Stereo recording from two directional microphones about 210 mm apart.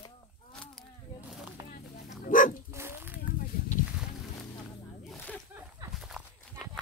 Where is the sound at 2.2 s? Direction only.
40° left (ahead or behind).